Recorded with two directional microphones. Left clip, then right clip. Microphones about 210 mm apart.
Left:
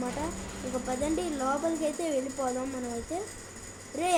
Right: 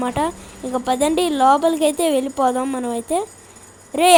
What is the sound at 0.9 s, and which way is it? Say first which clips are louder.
A woman's voice: right 14 dB; 40° right (ahead or behind).